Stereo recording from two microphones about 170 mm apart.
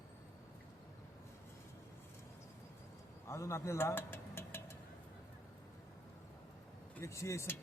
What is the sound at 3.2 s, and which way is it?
Vehicle, 15° left (ahead or behind).